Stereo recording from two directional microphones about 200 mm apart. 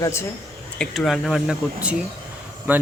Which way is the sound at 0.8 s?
Centre (ahead or behind).